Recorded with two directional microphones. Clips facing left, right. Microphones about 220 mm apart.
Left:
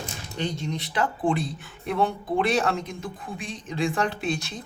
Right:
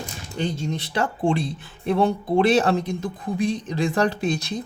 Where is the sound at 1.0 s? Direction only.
25° right (ahead or behind).